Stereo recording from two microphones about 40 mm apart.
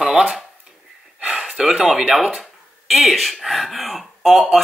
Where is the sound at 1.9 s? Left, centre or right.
Centre.